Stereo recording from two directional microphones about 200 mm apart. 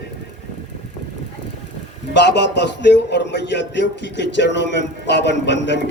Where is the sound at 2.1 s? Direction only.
60° left (ahead or behind).